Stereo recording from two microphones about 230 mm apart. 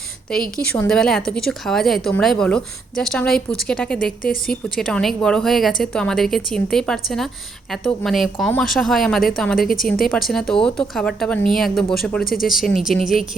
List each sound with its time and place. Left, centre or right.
0.3 s a woman's voice: centre